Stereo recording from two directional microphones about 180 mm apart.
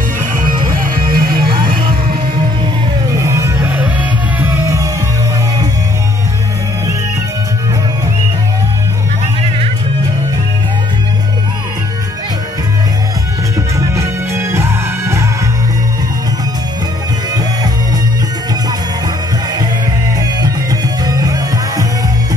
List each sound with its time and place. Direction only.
1.1 s music: 55° right (ahead or behind)
3.2 s music: 15° right (ahead or behind)
13.7 s music: 15° right (ahead or behind)
21.0 s music: 20° right (ahead or behind)